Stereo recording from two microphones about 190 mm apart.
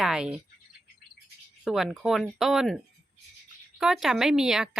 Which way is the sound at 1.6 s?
Centre (ahead or behind).